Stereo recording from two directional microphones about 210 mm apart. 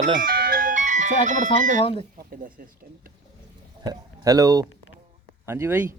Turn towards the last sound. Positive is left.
turn(degrees=-10)  # may be behind; listen again after turning